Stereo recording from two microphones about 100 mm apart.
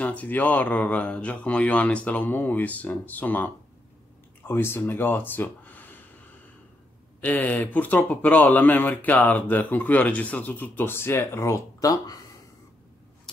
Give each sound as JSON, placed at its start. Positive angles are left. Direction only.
{"t": 0.0, "sound": "speech", "side_deg": 15}
{"t": 7.2, "sound": "speech", "side_deg": 15}